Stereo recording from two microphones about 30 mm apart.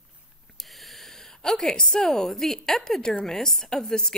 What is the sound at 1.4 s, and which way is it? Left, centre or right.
Speech, centre.